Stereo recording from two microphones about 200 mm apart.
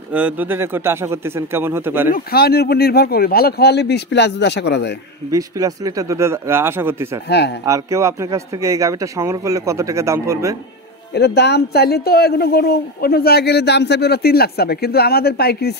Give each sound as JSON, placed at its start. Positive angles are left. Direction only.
{"t": 0.1, "sound": "speech", "side_deg": -5}
{"t": 2.0, "sound": "speech", "side_deg": 45}
{"t": 5.3, "sound": "speech", "side_deg": -15}
{"t": 7.2, "sound": "a man's voice", "side_deg": 55}
{"t": 7.6, "sound": "speech", "side_deg": -15}
{"t": 11.1, "sound": "speech", "side_deg": 55}